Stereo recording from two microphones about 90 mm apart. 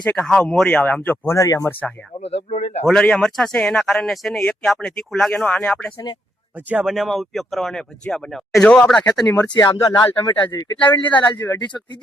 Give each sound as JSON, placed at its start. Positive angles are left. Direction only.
{"t": 0.0, "sound": "speech", "side_deg": 20}
{"t": 0.3, "sound": "speech", "side_deg": 5}
{"t": 2.8, "sound": "speech", "side_deg": 5}
{"t": 6.6, "sound": "speech", "side_deg": -20}
{"t": 6.8, "sound": "speech", "side_deg": 0}
{"t": 9.2, "sound": "speech", "side_deg": 35}